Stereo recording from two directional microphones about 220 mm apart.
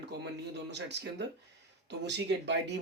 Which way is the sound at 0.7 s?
50° right (ahead or behind).